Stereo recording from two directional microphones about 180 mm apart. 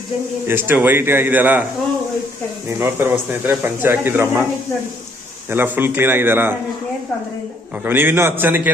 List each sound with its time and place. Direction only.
0.4 s speech: 10° right (ahead or behind)
2.6 s speech: 15° right (ahead or behind)
5.5 s speech: 10° right (ahead or behind)
7.9 s speech: 10° right (ahead or behind)